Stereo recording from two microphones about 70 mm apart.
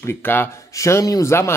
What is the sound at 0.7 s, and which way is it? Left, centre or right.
Speech, left.